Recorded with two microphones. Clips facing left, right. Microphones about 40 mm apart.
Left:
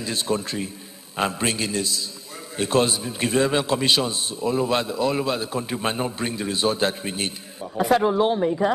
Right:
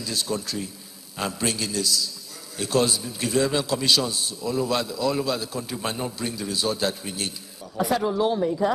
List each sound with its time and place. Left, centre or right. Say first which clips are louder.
0.0 s a man's voice: left 3 dB; left